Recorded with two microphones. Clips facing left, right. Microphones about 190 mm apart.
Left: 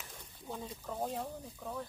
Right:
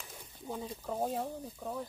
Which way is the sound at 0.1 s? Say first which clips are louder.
Right 4 dB; 10° right (ahead or behind).